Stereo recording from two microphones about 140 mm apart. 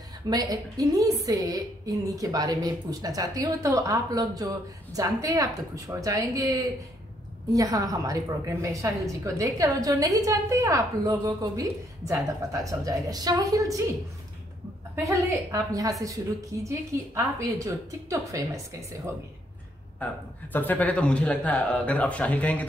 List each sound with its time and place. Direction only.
0.3 s a woman's voice: 25° right (ahead or behind)
15.0 s a woman's voice: 20° right (ahead or behind)
20.5 s speech: 10° left (ahead or behind)